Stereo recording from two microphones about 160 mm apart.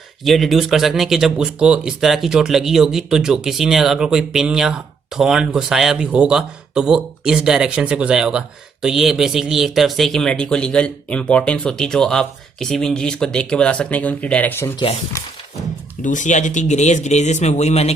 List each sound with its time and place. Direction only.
0.3 s speech: centre (ahead or behind)
16.0 s speech: 50° left (ahead or behind)